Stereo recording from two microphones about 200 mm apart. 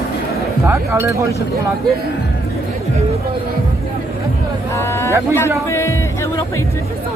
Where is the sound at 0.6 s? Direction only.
15° right (ahead or behind).